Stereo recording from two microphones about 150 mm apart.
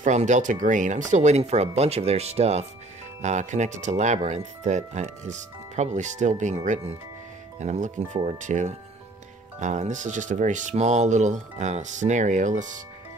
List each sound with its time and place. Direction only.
0.0 s speech: 55° right (ahead or behind)